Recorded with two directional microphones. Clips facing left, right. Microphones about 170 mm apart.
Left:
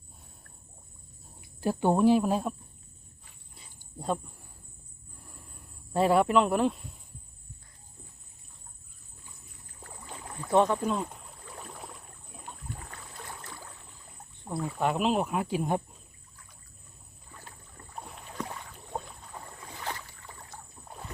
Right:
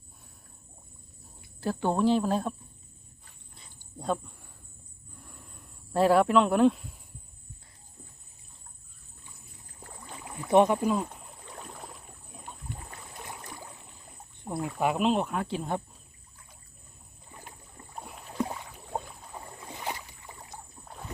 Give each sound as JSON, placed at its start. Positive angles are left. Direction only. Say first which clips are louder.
{"t": 1.6, "sound": "speech", "louder": "left 3 dB", "side_deg": 15}
{"t": 5.9, "sound": "speech", "louder": "right 1 dB", "side_deg": 0}
{"t": 10.2, "sound": "rowboat", "louder": "right 3 dB", "side_deg": -10}
{"t": 12.9, "sound": "a sound", "louder": "right 1 dB", "side_deg": -15}
{"t": 14.5, "sound": "speech", "louder": "right 1 dB", "side_deg": -20}
{"t": 14.8, "sound": "speech", "louder": "right 1 dB", "side_deg": 0}
{"t": 17.3, "sound": "rowboat", "louder": "right 2 dB", "side_deg": -15}
{"t": 18.0, "sound": "rowboat", "louder": "right 7 dB", "side_deg": -5}
{"t": 19.0, "sound": "boat", "louder": "right 1 dB", "side_deg": -15}